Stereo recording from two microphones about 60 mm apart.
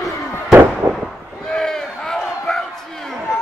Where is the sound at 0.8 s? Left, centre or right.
Right.